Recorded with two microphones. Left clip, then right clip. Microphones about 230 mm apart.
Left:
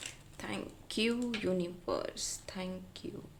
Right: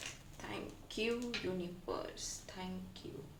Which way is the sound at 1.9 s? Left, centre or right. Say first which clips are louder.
Left 5 dB; left.